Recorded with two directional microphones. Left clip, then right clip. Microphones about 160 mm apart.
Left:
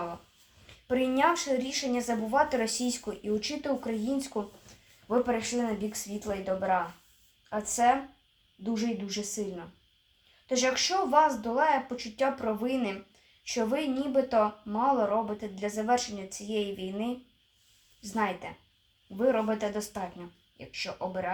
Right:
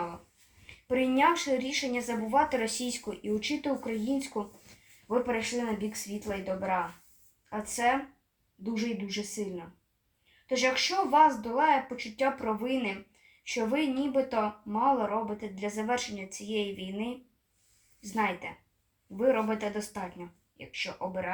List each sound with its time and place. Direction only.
0.9 s a woman's voice: 15° left (ahead or behind)
10.4 s speech: 20° left (ahead or behind)
18.1 s speech: 20° left (ahead or behind)